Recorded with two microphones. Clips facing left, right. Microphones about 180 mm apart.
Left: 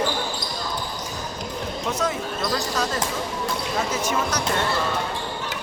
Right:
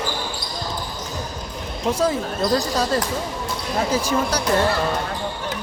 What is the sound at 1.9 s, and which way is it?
Speech, 30° right (ahead or behind).